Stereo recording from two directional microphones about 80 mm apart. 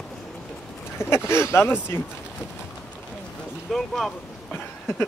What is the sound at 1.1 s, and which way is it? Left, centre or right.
Speech, left.